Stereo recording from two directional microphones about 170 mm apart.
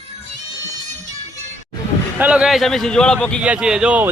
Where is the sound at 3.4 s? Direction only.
5° right (ahead or behind).